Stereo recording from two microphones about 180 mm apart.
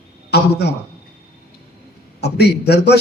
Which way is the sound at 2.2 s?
65° left (ahead or behind).